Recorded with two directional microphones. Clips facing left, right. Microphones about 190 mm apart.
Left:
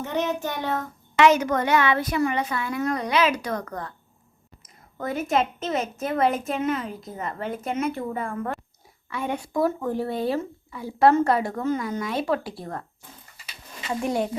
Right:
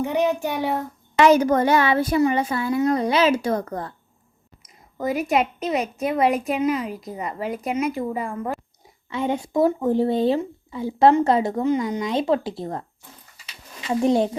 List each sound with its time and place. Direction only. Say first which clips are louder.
0.0 s child singing: right 5 dB; 15° right (ahead or behind)
0.4 s a woman's voice: right 4 dB; 15° right (ahead or behind)
1.2 s speech: right 3 dB; 35° right (ahead or behind)
5.0 s a woman's voice: right 3 dB; centre (ahead or behind)
9.0 s speech: right 5 dB; 20° right (ahead or behind)
14.0 s speech: right 7 dB; 25° right (ahead or behind)